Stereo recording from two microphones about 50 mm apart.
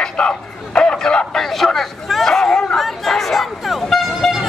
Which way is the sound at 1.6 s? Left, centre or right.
Centre.